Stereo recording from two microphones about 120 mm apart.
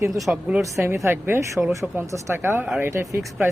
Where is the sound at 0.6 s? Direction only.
25° right (ahead or behind).